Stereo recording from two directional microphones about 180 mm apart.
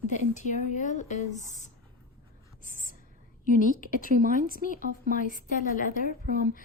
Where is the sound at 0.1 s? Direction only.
45° left (ahead or behind).